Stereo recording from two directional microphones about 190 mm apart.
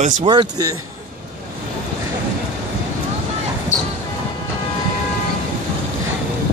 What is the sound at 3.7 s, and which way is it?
Music, 40° left (ahead or behind).